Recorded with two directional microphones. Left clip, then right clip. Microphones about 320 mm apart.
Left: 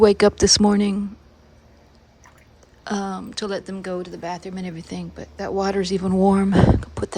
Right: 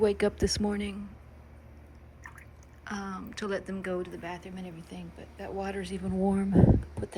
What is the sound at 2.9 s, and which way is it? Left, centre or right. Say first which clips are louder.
Speech: left 11 dB; centre.